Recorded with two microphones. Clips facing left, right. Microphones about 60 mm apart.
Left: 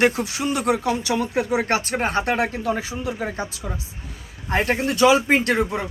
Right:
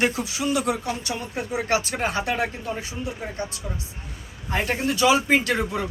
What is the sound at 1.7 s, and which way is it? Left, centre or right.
Speech, left.